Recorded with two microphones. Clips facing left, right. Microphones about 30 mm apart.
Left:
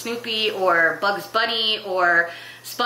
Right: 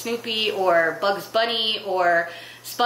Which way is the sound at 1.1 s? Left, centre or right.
Centre.